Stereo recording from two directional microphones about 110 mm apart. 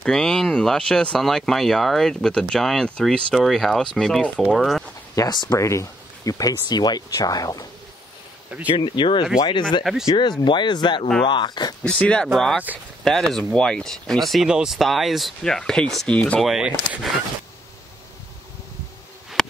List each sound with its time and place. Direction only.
0.0 s speech: 5° left (ahead or behind)
5.1 s speech: 35° left (ahead or behind)
8.6 s speech: 45° left (ahead or behind)
11.8 s speech: 10° left (ahead or behind)
16.4 s speech: 5° right (ahead or behind)